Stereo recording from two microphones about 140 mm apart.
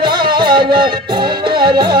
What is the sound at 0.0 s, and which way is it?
Music, 35° right (ahead or behind).